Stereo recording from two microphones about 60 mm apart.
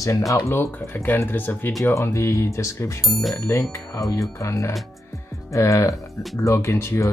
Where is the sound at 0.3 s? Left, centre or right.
Left.